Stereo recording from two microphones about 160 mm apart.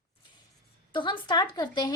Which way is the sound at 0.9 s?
30° left (ahead or behind).